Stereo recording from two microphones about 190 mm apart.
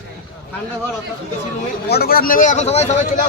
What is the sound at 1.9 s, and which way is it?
A man's voice, 55° left (ahead or behind).